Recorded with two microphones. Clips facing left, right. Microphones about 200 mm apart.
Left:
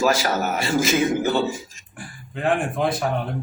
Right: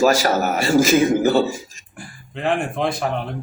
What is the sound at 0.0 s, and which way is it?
A man's voice, 45° right (ahead or behind).